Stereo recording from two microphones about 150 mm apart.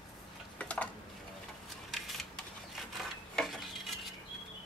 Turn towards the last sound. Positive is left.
turn(degrees=0)  # may be behind; listen again after turning